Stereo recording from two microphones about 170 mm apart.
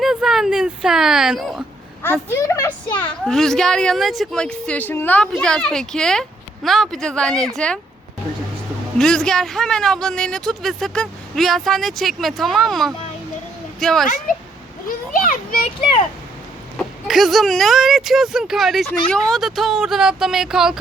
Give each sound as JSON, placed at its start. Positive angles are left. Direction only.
{"t": 0.0, "sound": "a sound", "side_deg": 0}
{"t": 2.0, "sound": "a woman's voice", "side_deg": 10}
{"t": 9.0, "sound": "a woman's voice", "side_deg": 5}
{"t": 14.8, "sound": "children playing", "side_deg": 55}
{"t": 15.6, "sound": "a child's voice", "side_deg": 30}
{"t": 16.7, "sound": "a woman's voice", "side_deg": 0}